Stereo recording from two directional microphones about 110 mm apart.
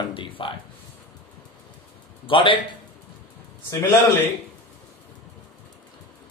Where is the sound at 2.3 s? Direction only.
50° left (ahead or behind).